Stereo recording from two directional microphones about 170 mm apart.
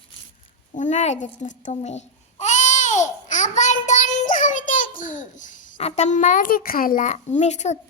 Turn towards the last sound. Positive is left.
turn(degrees=40)  # may be behind; listen again after turning